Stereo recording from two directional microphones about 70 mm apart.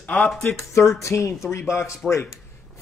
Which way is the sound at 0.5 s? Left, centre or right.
Left.